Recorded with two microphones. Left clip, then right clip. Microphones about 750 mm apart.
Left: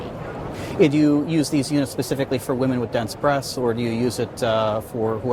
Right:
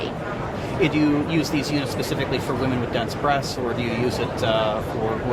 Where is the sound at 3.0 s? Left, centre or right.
Left.